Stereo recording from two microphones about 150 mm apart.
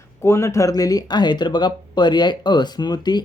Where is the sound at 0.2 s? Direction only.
20° left (ahead or behind).